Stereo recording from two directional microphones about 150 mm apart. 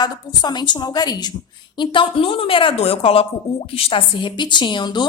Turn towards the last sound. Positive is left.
turn(degrees=30)  # may be behind; listen again after turning